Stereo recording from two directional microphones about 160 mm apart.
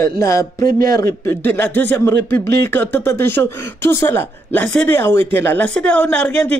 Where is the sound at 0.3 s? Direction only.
20° left (ahead or behind).